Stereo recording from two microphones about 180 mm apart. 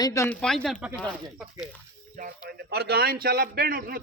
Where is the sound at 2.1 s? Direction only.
50° right (ahead or behind).